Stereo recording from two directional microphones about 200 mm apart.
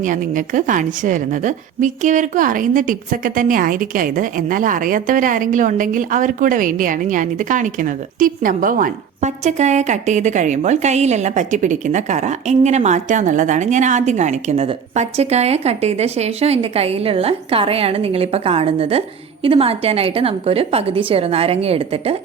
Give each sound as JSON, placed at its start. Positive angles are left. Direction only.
{"t": 0.0, "sound": "a woman's voice", "side_deg": -40}